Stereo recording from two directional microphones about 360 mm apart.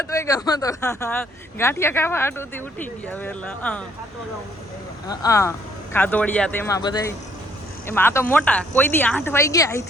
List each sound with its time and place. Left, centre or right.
0.0 s speech: centre
5.0 s speech: centre